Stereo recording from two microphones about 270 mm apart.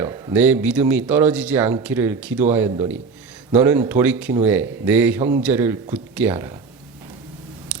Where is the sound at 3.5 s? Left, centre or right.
Centre.